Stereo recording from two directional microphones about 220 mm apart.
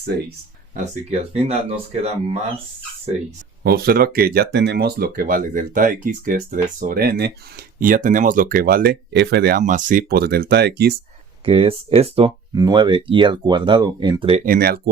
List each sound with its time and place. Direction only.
1.1 s speech: 25° right (ahead or behind)
3.6 s speech: 45° right (ahead or behind)
11.4 s speech: 25° right (ahead or behind)
14.4 s speech: 40° right (ahead or behind)